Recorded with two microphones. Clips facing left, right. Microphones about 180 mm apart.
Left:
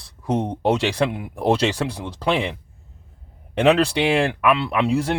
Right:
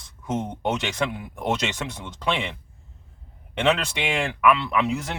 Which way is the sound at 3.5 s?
35° left (ahead or behind).